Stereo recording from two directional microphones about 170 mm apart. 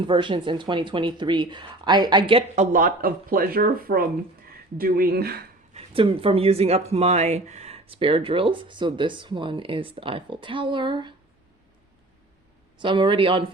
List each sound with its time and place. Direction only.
0.0 s speech: 30° right (ahead or behind)
2.6 s speech: 55° right (ahead or behind)
5.7 s speech: 30° right (ahead or behind)
12.8 s speech: 30° right (ahead or behind)